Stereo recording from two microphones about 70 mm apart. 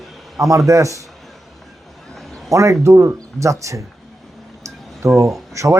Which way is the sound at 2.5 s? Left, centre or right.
Right.